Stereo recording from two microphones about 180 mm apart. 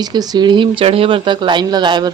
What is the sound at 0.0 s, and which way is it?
Speech, 20° right (ahead or behind).